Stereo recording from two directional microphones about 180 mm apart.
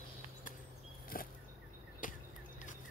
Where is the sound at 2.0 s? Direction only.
50° left (ahead or behind).